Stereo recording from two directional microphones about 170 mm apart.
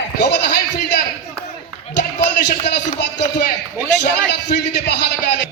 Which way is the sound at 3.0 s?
75° left (ahead or behind).